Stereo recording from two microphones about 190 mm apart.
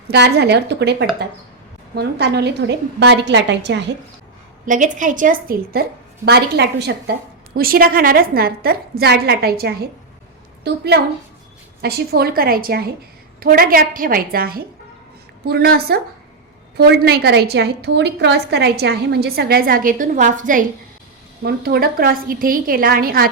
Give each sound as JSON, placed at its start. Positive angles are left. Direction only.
{"t": 0.1, "sound": "a woman's voice", "side_deg": -60}
{"t": 4.6, "sound": "a woman's voice", "side_deg": -45}
{"t": 6.2, "sound": "a woman's voice", "side_deg": -60}
{"t": 21.4, "sound": "a woman's voice", "side_deg": -55}